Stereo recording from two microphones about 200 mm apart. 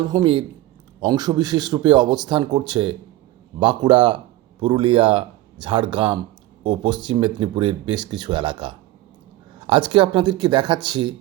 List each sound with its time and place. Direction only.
0.1 s speech: 20° right (ahead or behind)